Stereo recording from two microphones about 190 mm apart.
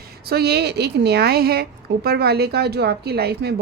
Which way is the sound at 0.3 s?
55° right (ahead or behind).